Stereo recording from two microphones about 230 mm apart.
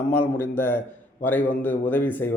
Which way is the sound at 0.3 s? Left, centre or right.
Centre.